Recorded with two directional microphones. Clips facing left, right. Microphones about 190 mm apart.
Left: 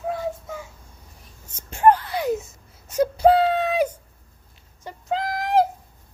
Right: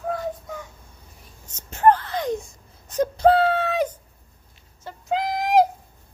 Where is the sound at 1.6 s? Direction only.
10° left (ahead or behind).